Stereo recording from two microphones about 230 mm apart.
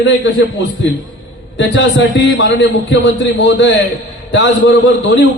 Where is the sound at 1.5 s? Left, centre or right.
Left.